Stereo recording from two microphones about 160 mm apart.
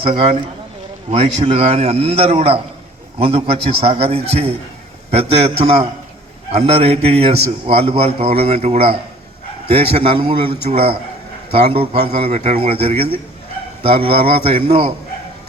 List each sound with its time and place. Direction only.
0.0 s a man's voice: 35° right (ahead or behind)